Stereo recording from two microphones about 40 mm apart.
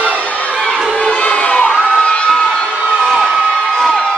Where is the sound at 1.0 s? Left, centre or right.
Left.